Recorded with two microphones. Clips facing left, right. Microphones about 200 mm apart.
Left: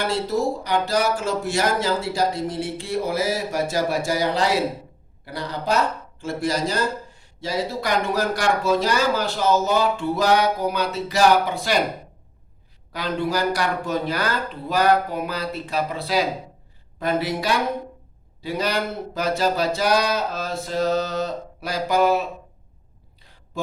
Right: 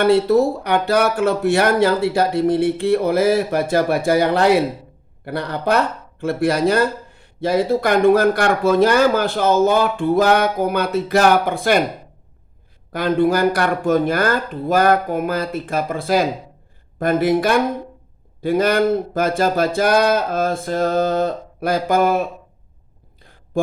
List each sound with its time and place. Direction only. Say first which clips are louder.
0.0 s speech: right 9 dB; 60° right (ahead or behind)
12.9 s speech: right 8 dB; 55° right (ahead or behind)